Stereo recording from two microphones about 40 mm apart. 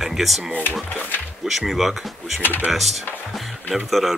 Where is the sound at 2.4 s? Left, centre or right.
Left.